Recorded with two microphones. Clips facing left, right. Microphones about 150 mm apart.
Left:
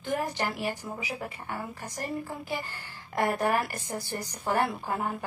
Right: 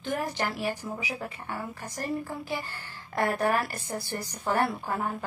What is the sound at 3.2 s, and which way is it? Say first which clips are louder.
A woman's voice: even; 15° left (ahead or behind).